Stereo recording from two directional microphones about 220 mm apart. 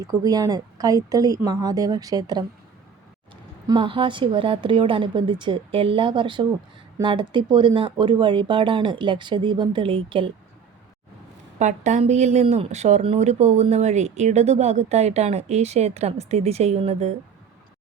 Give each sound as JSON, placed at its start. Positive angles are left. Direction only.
{"t": 0.0, "sound": "a woman's voice", "side_deg": -15}
{"t": 3.7, "sound": "speech", "side_deg": -20}
{"t": 11.6, "sound": "speech", "side_deg": -35}